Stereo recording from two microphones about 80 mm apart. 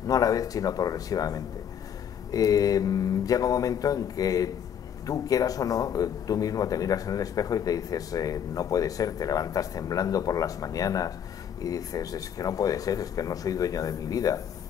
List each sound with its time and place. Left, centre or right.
0.0 s a man's voice: left